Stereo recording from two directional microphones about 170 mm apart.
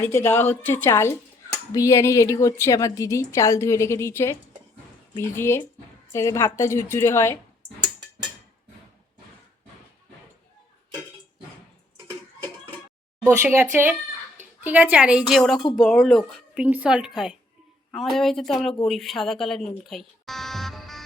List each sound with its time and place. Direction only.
0.0 s a woman's voice: 15° left (ahead or behind)
13.2 s a woman's voice: 15° right (ahead or behind)